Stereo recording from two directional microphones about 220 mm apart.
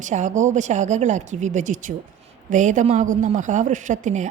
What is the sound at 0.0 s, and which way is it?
A woman's voice, 35° right (ahead or behind).